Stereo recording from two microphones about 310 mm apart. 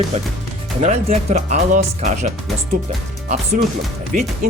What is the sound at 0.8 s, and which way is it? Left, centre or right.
Speech, right.